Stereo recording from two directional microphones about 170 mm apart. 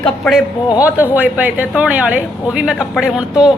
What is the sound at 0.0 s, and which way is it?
A man's voice, centre (ahead or behind).